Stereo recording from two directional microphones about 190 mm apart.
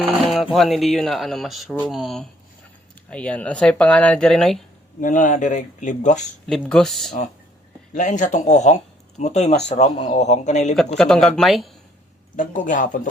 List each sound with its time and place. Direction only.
0.0 s a sound: centre (ahead or behind)
0.5 s speech: centre (ahead or behind)
4.9 s speech: 40° left (ahead or behind)
6.5 s speech: 5° left (ahead or behind)
7.9 s speech: 40° left (ahead or behind)
10.9 s speech: centre (ahead or behind)
12.4 s speech: 45° left (ahead or behind)